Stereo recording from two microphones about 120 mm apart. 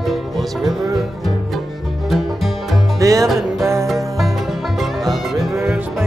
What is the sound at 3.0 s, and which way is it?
Music, 25° right (ahead or behind).